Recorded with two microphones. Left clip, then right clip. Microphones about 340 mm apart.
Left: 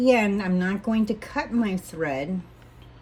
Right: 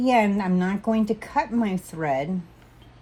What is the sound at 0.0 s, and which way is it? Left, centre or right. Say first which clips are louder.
Speech: even; centre.